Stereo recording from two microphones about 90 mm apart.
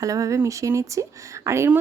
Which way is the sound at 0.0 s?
40° right (ahead or behind).